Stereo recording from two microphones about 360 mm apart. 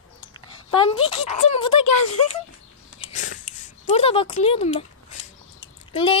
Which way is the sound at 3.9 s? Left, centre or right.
Centre.